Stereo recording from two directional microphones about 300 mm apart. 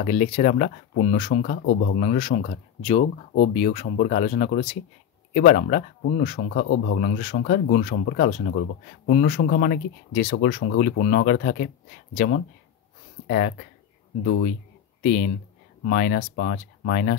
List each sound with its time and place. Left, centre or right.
0.0 s speech: left
15.0 s speech: left